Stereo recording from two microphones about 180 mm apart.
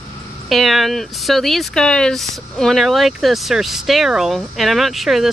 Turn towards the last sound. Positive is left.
turn(degrees=0)  # may be behind; listen again after turning